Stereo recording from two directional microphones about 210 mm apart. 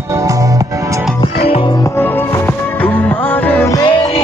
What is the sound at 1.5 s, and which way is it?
Music, 25° left (ahead or behind).